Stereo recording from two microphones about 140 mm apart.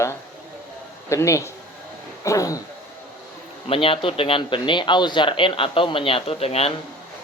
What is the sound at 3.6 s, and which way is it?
A man's voice, 40° left (ahead or behind).